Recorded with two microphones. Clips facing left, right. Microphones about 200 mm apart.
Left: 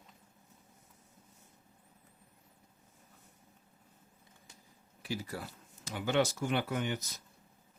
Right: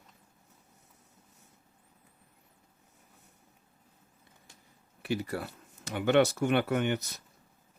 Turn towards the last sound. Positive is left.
turn(degrees=-65)  # may be behind; listen again after turning